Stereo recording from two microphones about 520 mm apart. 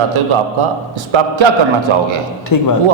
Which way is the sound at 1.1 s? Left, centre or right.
Right.